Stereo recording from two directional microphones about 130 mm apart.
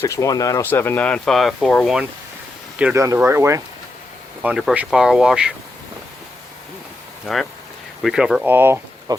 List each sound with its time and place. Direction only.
0.0 s speech: 25° left (ahead or behind); by 2.0 s centre (ahead or behind)
2.9 s speech: 25° right (ahead or behind)
4.4 s speech: 5° right (ahead or behind)
8.0 s speech: 5° right (ahead or behind)
9.1 s speech: 30° right (ahead or behind)